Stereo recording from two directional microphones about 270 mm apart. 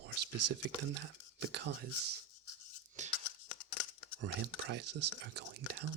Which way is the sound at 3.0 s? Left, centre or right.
Right.